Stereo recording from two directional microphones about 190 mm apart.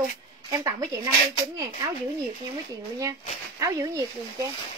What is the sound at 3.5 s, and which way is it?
Speech, 15° right (ahead or behind).